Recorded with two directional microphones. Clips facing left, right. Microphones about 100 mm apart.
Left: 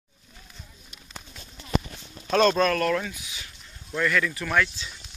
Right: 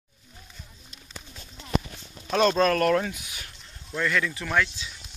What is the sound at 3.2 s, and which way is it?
Speech, 55° right (ahead or behind).